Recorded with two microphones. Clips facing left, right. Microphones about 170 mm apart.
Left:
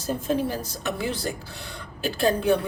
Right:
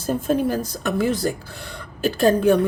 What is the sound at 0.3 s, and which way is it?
A woman's voice, 50° right (ahead or behind).